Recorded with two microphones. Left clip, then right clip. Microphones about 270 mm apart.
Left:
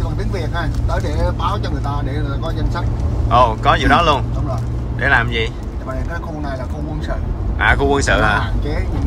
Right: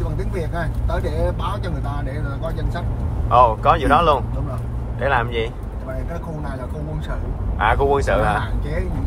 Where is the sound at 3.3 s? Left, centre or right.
Centre.